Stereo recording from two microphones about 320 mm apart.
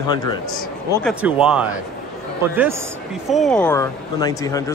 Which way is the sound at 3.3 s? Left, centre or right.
Centre.